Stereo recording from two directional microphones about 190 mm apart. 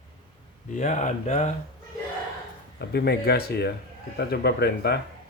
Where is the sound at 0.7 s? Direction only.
40° left (ahead or behind).